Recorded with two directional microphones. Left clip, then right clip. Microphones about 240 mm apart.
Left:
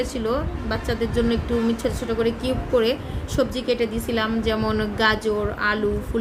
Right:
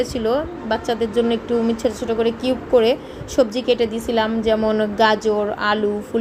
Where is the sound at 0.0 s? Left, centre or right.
Centre.